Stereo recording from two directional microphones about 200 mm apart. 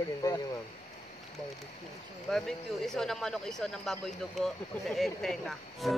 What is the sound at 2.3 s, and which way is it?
Speech, centre (ahead or behind).